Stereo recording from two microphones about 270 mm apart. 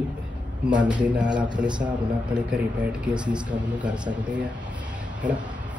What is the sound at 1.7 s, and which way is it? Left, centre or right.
Speech, centre.